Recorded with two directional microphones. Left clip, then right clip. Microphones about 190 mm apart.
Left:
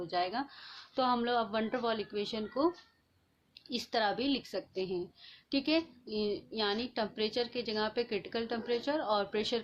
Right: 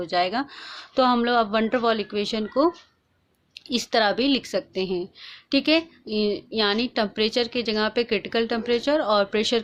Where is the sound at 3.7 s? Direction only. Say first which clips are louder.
Right 11 dB; 30° right (ahead or behind).